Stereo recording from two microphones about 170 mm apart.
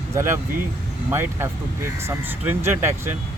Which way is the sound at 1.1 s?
15° right (ahead or behind).